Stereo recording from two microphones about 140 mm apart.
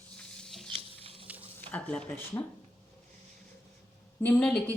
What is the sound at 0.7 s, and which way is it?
Patter, 40° right (ahead or behind).